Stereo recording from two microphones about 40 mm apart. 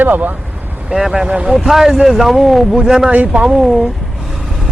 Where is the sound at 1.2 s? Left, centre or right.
Right.